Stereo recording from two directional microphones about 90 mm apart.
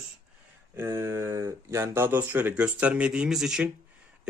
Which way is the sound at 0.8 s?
30° right (ahead or behind).